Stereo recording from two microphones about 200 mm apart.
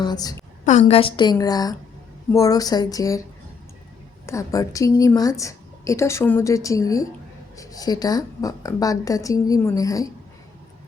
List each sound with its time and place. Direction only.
0.0 s a woman's voice: 20° left (ahead or behind)
0.6 s a woman's voice: 35° left (ahead or behind); by 3.2 s 15° left (ahead or behind)
4.3 s a woman's voice: 15° left (ahead or behind)